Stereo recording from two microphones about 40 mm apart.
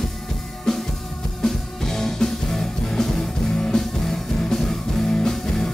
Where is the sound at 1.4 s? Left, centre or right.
Centre.